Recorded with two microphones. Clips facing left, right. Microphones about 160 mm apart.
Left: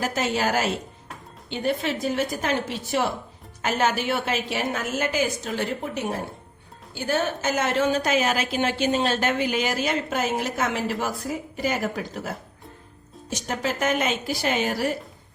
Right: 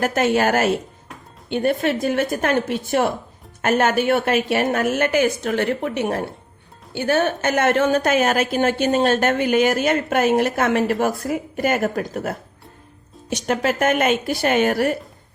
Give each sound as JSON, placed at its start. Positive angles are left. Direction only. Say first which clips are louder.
{"t": 0.0, "sound": "a woman's voice", "louder": "right 6 dB", "side_deg": -60}
{"t": 13.3, "sound": "a woman's voice", "louder": "right 7 dB", "side_deg": -65}